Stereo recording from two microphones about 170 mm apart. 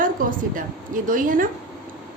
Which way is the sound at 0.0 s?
55° right (ahead or behind).